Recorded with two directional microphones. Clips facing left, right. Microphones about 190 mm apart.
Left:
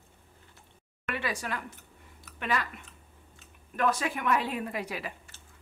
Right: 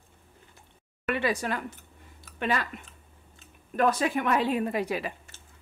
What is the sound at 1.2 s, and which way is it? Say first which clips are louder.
Speech: right 5 dB; 30° right (ahead or behind).